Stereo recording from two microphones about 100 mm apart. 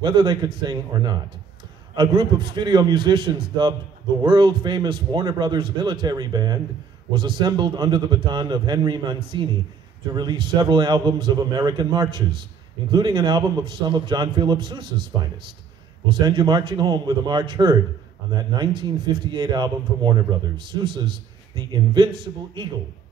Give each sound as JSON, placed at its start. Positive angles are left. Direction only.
{"t": 0.0, "sound": "a man's voice", "side_deg": -50}